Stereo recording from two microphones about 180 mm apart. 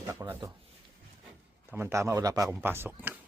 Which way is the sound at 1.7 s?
15° right (ahead or behind).